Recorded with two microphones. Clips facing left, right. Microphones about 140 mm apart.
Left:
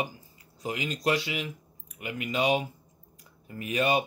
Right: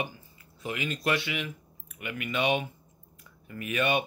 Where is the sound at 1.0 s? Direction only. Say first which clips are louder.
Left 2 dB; 40° left (ahead or behind).